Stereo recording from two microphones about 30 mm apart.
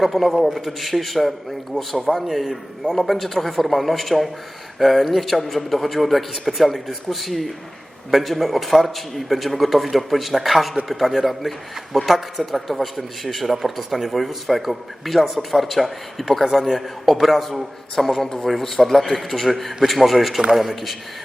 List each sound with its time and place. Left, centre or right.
0.0 s a man's voice: centre
2.3 s a man's voice: centre
17.9 s a man's voice: centre